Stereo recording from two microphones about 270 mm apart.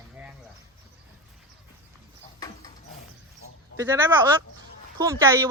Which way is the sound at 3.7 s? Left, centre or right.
Centre.